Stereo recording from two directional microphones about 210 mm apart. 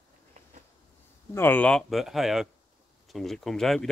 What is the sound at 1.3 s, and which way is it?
Speech, 10° left (ahead or behind).